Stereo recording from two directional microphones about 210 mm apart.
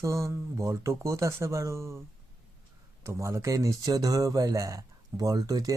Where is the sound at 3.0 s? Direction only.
15° right (ahead or behind).